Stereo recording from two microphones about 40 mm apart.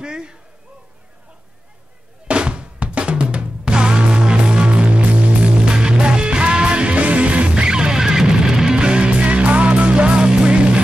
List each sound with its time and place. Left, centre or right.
0.0 s speech: right
2.2 s drum: right
5.7 s music: right